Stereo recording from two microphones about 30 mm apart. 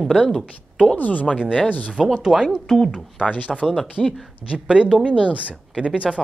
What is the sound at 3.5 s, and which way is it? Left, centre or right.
Speech, centre.